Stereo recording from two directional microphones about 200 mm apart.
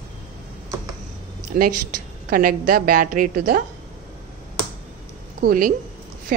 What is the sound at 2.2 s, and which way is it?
A woman's voice, 45° right (ahead or behind).